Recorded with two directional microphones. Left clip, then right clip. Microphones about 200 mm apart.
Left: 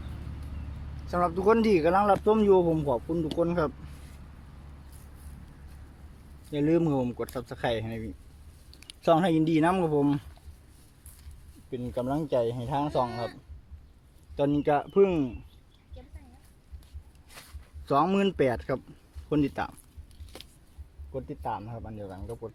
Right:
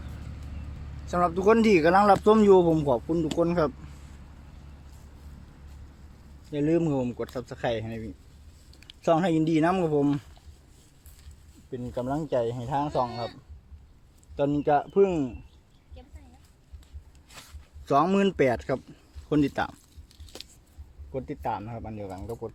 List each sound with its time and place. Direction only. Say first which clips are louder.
1.0 s speech: right 2 dB; 15° right (ahead or behind)
6.5 s speech: even; 5° right (ahead or behind)
11.7 s speech: even; centre (ahead or behind)
17.3 s a sound: right 1 dB; centre (ahead or behind)
17.8 s speech: right 2 dB; 15° right (ahead or behind)
20.2 s a sound: right 3 dB; 25° right (ahead or behind)
21.1 s speech: right 3 dB; 25° right (ahead or behind)